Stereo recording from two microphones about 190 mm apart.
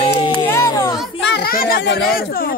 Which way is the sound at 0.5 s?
15° left (ahead or behind).